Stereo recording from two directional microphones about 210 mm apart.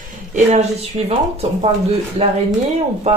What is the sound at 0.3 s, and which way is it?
Speech, 30° right (ahead or behind).